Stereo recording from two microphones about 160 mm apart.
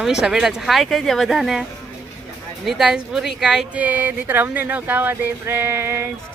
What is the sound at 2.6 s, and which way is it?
Speech, centre (ahead or behind).